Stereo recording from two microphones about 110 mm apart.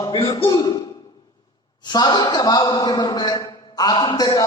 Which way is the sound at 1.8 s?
40° left (ahead or behind).